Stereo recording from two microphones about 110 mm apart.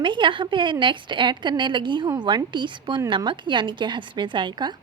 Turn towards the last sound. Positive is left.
turn(degrees=-45)  # may be behind; listen again after turning